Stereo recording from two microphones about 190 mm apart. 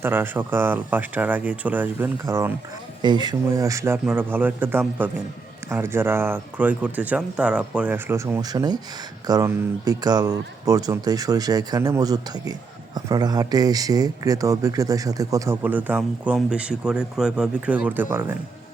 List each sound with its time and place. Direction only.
0.0 s speech: 10° right (ahead or behind)
3.0 s speech: 25° right (ahead or behind)